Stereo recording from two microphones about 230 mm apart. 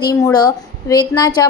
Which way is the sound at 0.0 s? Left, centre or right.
Centre.